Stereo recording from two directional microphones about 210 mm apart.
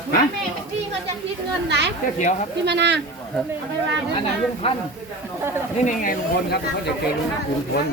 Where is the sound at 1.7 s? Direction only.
55° right (ahead or behind).